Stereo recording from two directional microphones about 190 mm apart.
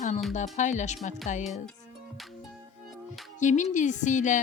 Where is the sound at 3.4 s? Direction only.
40° left (ahead or behind).